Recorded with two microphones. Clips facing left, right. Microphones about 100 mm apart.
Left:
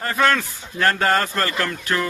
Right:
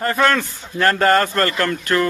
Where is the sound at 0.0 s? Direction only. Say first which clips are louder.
Right 2 dB; centre (ahead or behind).